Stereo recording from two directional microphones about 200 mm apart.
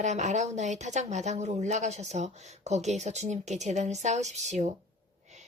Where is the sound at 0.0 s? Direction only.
35° right (ahead or behind).